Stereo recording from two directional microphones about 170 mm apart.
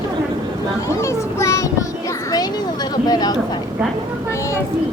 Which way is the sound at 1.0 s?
15° left (ahead or behind).